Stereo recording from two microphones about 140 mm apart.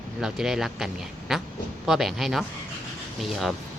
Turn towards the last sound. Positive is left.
turn(degrees=0)  # may be behind; listen again after turning